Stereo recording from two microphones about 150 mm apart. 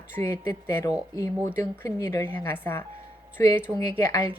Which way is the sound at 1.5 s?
20° left (ahead or behind).